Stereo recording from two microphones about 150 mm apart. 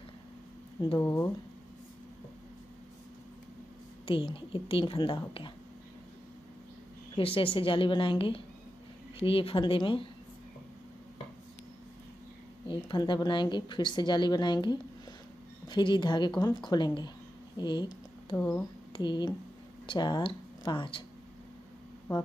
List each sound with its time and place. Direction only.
0.7 s a woman's voice: 25° left (ahead or behind)
4.0 s a woman's voice: 35° left (ahead or behind)
7.2 s a woman's voice: 35° left (ahead or behind)
12.6 s a woman's voice: 30° left (ahead or behind)
18.3 s speech: 10° left (ahead or behind)
18.9 s a woman's voice: 30° left (ahead or behind)